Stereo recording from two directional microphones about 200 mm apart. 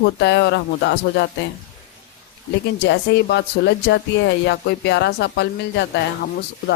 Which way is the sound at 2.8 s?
60° left (ahead or behind).